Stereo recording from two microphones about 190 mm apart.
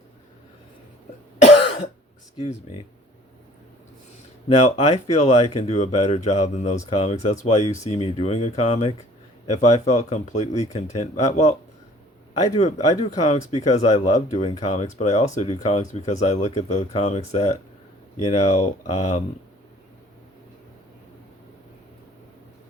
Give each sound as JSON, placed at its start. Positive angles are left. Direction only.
{"t": 1.4, "sound": "cough", "side_deg": 35}
{"t": 2.4, "sound": "speech", "side_deg": 35}
{"t": 4.4, "sound": "speech", "side_deg": 35}
{"t": 12.5, "sound": "speech", "side_deg": 35}